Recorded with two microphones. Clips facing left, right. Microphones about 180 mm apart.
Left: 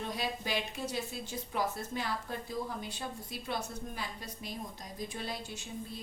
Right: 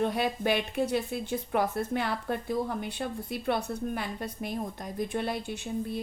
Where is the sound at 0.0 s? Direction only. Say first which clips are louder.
Right 9 dB; 60° right (ahead or behind).